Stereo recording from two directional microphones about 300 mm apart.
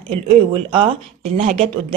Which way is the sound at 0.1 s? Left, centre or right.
Centre.